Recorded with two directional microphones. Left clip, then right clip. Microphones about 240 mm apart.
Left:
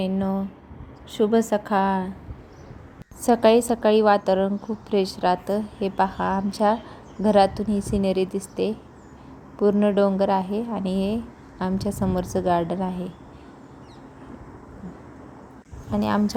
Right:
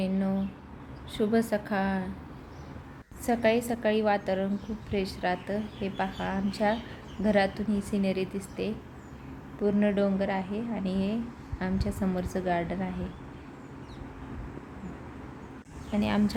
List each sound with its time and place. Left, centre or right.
0.0 s a woman's voice: left
3.2 s a woman's voice: left
15.9 s a woman's voice: left